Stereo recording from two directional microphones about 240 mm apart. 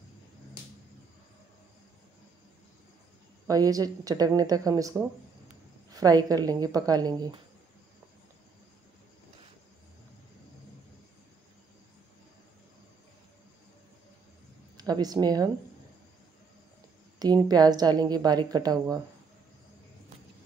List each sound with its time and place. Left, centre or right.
3.4 s a woman's voice: centre
14.8 s a woman's voice: centre
17.2 s a woman's voice: centre